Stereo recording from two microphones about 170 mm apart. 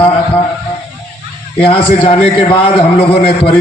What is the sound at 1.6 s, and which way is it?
A man's voice, 35° left (ahead or behind).